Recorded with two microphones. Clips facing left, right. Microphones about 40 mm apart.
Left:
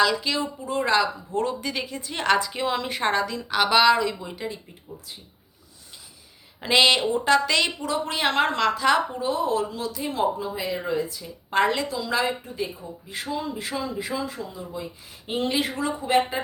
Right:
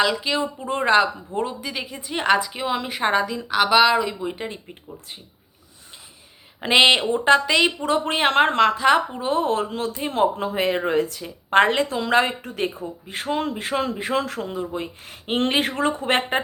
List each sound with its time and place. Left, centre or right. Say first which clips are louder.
0.0 s speech: right 1 dB; centre
0.3 s speech: right 2 dB; right
1.5 s a woman's voice: left 1 dB; centre
3.9 s speech: right 3 dB; right
4.4 s a woman's voice: even; right
6.6 s speech: right 3 dB; right
7.8 s a woman's voice: right 5 dB; right
10.3 s a woman's voice: right 6 dB; right
14.1 s a woman's voice: right 6 dB; right